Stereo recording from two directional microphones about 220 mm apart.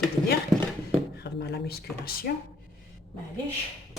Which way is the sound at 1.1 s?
45° left (ahead or behind).